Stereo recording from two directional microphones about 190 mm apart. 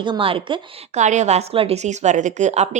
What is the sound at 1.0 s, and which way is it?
A woman's voice, 40° right (ahead or behind).